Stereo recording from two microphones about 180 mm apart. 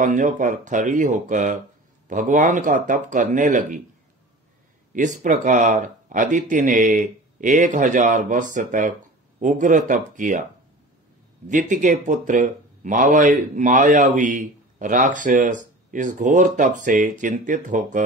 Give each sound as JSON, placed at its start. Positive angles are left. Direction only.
{"t": 0.0, "sound": "speech", "side_deg": -45}
{"t": 4.9, "sound": "speech", "side_deg": -45}
{"t": 11.4, "sound": "speech", "side_deg": -45}